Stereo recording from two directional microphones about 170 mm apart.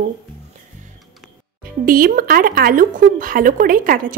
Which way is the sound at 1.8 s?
60° right (ahead or behind).